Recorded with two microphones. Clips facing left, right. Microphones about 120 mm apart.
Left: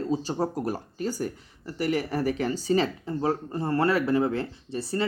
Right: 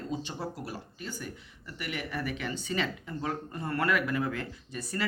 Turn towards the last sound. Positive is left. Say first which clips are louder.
# left 7 dB
turn(degrees=30)  # may be behind; listen again after turning